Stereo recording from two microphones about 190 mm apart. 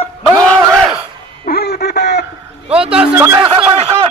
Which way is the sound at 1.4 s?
55° left (ahead or behind).